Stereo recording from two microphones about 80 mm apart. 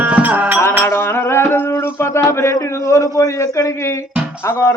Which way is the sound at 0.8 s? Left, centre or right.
Left.